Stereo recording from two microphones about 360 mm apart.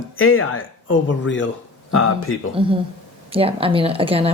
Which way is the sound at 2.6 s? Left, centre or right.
Centre.